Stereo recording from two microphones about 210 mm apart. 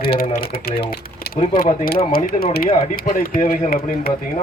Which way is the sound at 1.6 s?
45° left (ahead or behind).